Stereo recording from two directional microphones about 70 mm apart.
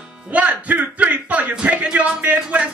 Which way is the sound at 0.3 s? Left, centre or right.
Right.